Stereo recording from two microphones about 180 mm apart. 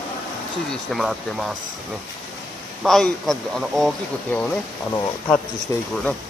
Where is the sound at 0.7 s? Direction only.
Centre (ahead or behind).